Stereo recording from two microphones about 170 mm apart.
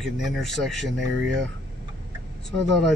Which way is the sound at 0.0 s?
Centre (ahead or behind).